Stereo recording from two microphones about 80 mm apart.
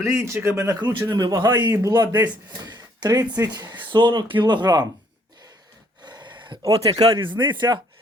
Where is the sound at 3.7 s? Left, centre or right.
Right.